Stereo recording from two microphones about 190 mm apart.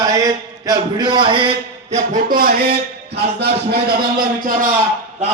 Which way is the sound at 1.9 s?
45° right (ahead or behind).